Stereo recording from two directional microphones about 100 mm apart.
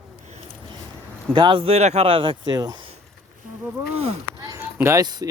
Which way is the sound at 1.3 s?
55° right (ahead or behind).